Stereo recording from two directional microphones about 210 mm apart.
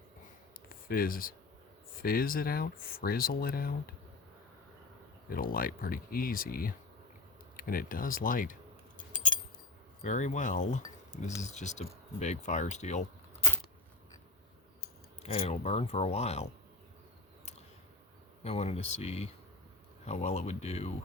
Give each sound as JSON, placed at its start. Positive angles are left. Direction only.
{"t": 0.7, "sound": "speech", "side_deg": 45}
{"t": 5.3, "sound": "speech", "side_deg": 40}
{"t": 9.0, "sound": "keys jangling", "side_deg": 40}
{"t": 10.0, "sound": "speech", "side_deg": 35}
{"t": 15.2, "sound": "speech", "side_deg": 30}
{"t": 18.4, "sound": "speech", "side_deg": 30}